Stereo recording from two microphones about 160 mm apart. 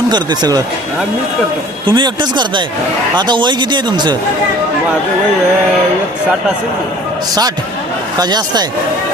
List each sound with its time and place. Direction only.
0.1 s speech: 25° right (ahead or behind)
1.9 s speech: 30° right (ahead or behind)
8.2 s speech: 25° right (ahead or behind)